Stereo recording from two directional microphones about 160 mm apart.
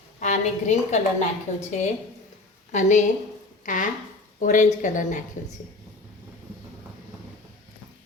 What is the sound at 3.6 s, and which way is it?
A woman's voice, 55° left (ahead or behind).